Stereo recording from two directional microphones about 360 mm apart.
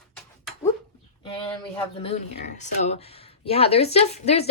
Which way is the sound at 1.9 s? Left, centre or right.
Centre.